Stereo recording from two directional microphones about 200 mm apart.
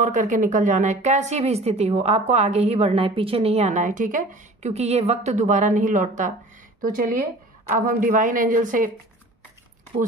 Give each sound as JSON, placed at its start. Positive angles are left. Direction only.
{"t": 0.0, "sound": "a woman's voice", "side_deg": -40}